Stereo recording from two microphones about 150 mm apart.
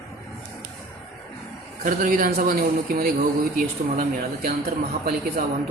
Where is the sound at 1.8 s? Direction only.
65° right (ahead or behind); by 3.1 s 80° right.